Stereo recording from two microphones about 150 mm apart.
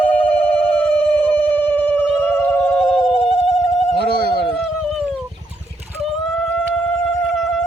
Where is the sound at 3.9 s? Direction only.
90° right.